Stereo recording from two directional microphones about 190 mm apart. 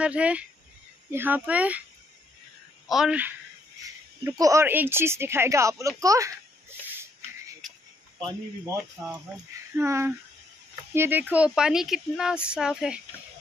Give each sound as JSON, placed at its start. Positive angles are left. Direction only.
{"t": 0.0, "sound": "speech", "side_deg": -5}
{"t": 2.9, "sound": "speech", "side_deg": -5}
{"t": 6.9, "sound": "a sound", "side_deg": -10}
{"t": 8.2, "sound": "speech", "side_deg": -20}